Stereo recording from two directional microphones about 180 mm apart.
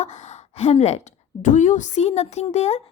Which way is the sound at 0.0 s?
40° left (ahead or behind).